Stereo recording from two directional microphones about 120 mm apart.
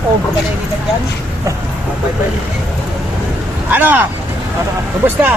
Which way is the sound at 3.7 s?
15° right (ahead or behind).